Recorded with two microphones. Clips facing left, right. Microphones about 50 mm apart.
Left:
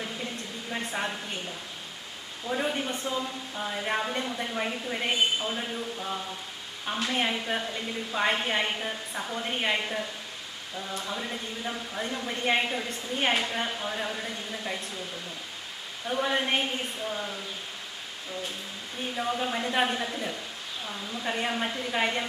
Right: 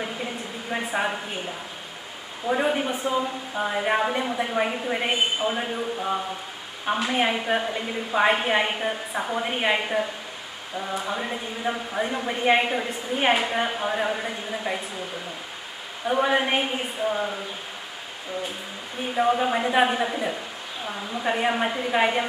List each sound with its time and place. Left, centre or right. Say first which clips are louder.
0.0 s a sound: right 5 dB; centre
0.9 s a woman's voice: right 7 dB; centre
2.5 s a woman's voice: right 6 dB; right
2.9 s speech: right 6 dB; centre
3.5 s a woman's voice: right 7 dB; right
16.0 s a woman's voice: right 6 dB; right
19.1 s a woman's voice: right 8 dB; right